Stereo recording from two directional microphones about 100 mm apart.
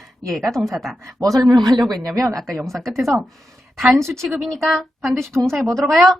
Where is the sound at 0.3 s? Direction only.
5° left (ahead or behind).